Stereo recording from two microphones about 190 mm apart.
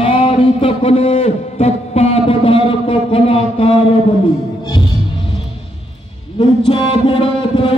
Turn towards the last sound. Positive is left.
turn(degrees=25)  # may be behind; listen again after turning